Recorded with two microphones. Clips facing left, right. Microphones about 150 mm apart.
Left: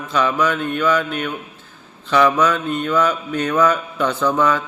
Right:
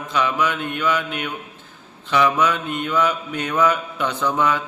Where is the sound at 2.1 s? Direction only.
15° right (ahead or behind).